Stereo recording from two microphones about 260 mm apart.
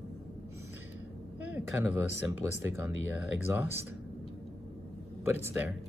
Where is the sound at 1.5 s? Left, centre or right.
Centre.